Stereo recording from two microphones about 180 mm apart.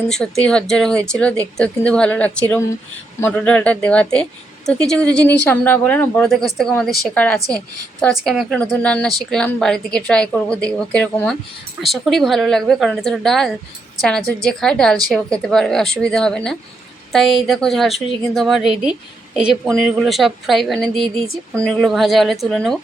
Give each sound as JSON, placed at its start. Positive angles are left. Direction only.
{"t": 0.1, "sound": "speech", "side_deg": 5}